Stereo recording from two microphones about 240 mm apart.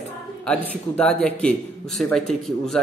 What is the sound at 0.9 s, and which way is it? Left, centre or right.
A man's voice, centre.